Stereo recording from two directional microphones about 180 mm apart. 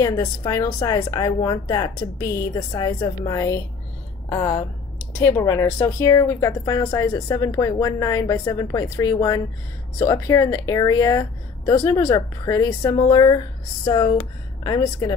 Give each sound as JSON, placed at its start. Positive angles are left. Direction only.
{"t": 0.0, "sound": "a woman's voice", "side_deg": 20}
{"t": 14.6, "sound": "speech", "side_deg": 20}